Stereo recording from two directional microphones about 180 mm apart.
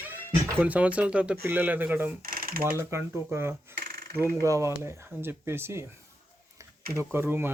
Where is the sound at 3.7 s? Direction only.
60° right (ahead or behind).